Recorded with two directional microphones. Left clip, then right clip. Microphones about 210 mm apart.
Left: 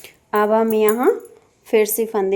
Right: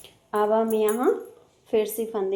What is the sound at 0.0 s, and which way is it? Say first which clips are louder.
A woman's voice: left 6 dB; 50° left (ahead or behind).